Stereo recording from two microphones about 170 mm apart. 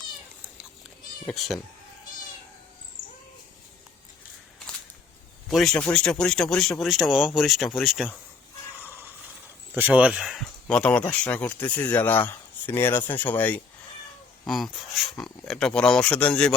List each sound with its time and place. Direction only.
1.3 s speech: centre (ahead or behind)
5.5 s speech: centre (ahead or behind)
9.7 s speech: 10° right (ahead or behind); by 16.5 s 5° left (ahead or behind)